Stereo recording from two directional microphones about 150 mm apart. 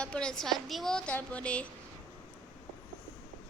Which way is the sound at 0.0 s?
5° left (ahead or behind).